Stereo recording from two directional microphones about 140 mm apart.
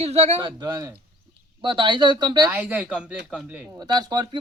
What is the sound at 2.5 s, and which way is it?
Speech, 10° right (ahead or behind).